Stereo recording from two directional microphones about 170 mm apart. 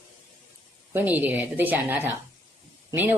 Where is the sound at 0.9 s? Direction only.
10° right (ahead or behind).